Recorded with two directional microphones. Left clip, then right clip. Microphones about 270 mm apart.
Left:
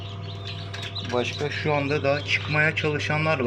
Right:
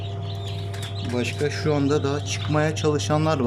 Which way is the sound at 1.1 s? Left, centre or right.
Centre.